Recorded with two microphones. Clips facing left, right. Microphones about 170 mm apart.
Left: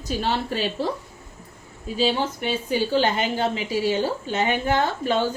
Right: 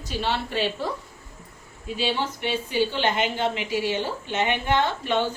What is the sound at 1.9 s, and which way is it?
A woman's voice, 40° left (ahead or behind).